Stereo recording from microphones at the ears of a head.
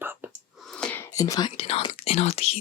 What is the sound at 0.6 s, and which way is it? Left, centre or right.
Whispering, left.